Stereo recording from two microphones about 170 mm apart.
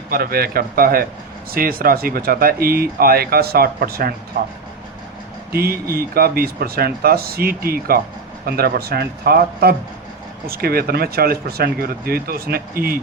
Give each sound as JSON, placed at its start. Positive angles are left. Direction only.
{"t": 0.1, "sound": "speech", "side_deg": -60}